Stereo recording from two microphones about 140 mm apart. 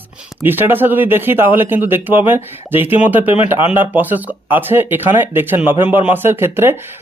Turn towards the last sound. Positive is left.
turn(degrees=-15)  # may be behind; listen again after turning